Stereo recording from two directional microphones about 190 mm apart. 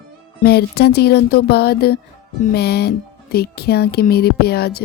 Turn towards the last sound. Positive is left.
turn(degrees=55)  # may be behind; listen again after turning